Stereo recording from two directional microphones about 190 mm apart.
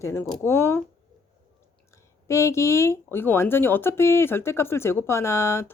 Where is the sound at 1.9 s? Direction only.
15° left (ahead or behind).